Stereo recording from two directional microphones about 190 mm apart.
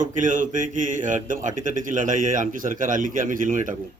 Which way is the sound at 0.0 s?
45° right (ahead or behind).